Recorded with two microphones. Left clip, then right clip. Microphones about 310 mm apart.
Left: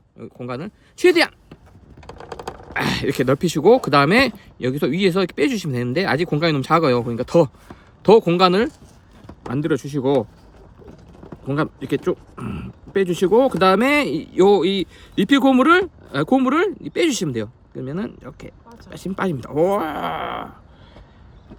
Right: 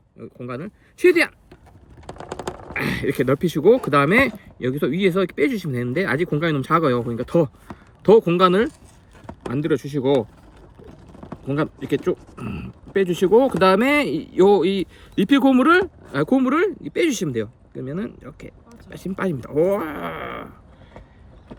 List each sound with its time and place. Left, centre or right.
0.2 s speech: centre
1.1 s speech: left
2.0 s typing: right
2.7 s speech: centre
11.4 s speech: centre